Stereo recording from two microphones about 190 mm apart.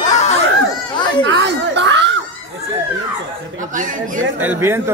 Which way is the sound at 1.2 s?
70° right (ahead or behind).